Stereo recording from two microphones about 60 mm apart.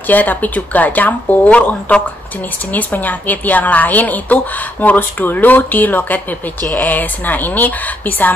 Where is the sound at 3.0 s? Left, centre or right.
Left.